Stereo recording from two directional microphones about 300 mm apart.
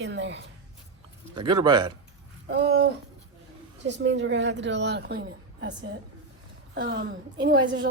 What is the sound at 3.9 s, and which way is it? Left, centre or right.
A woman's voice, right.